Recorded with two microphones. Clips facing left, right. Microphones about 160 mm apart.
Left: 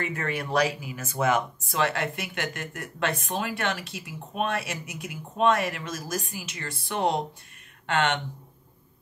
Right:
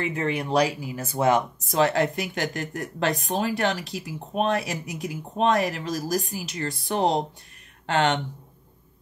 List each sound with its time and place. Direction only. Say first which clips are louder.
0.0 s speech: right 4 dB; 25° right (ahead or behind)
0.6 s speech: right 2 dB; 35° right (ahead or behind)